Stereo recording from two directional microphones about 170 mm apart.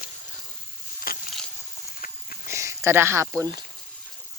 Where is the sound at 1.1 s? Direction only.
60° left (ahead or behind).